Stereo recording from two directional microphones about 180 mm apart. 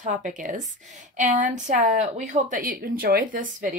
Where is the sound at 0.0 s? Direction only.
45° right (ahead or behind).